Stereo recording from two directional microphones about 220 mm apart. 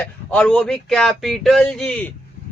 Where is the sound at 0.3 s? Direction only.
5° left (ahead or behind).